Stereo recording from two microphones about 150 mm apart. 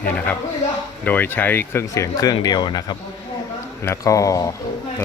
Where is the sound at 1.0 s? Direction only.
10° left (ahead or behind).